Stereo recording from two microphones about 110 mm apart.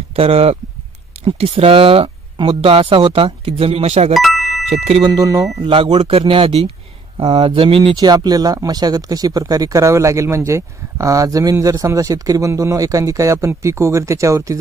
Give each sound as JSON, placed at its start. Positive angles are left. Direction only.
{"t": 0.1, "sound": "speech", "side_deg": -65}
{"t": 4.1, "sound": "a sound", "side_deg": 0}
{"t": 4.6, "sound": "speech", "side_deg": -70}
{"t": 5.0, "sound": "speech", "side_deg": -35}
{"t": 5.6, "sound": "speech", "side_deg": -50}
{"t": 5.9, "sound": "speech", "side_deg": -60}
{"t": 7.9, "sound": "speech", "side_deg": -40}